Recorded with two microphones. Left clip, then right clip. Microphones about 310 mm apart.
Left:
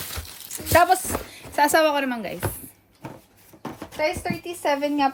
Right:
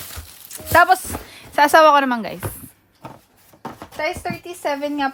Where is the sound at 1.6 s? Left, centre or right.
Right.